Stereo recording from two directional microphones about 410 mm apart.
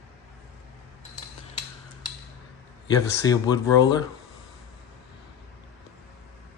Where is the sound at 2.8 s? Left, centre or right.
Centre.